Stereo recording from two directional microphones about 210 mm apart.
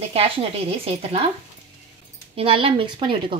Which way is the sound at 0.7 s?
30° right (ahead or behind).